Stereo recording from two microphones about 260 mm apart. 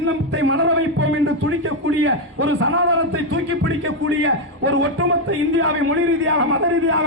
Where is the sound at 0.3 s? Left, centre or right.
Right.